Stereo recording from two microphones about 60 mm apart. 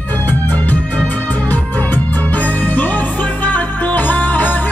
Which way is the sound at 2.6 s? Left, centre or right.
Left.